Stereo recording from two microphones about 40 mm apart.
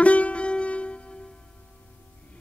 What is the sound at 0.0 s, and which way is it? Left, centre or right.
Music, left.